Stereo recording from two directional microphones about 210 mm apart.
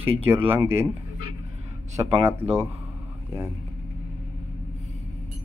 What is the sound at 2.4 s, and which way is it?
Speech, 10° right (ahead or behind).